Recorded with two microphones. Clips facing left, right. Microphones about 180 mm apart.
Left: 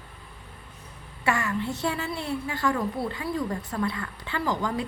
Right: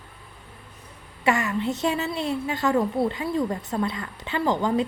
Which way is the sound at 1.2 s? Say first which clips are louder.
Right 4 dB; 20° right (ahead or behind).